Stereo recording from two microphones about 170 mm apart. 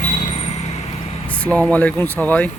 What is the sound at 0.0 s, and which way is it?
Vehicle, 45° left (ahead or behind).